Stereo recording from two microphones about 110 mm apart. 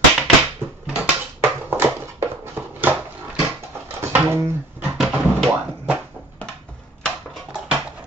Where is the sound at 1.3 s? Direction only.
20° right (ahead or behind).